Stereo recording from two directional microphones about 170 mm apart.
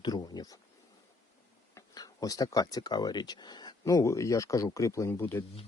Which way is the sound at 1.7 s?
20° left (ahead or behind).